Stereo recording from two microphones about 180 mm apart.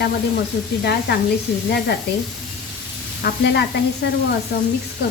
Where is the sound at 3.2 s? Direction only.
65° left (ahead or behind).